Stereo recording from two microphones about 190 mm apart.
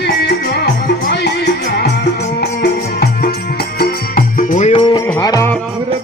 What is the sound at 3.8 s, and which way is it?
Music, 50° left (ahead or behind).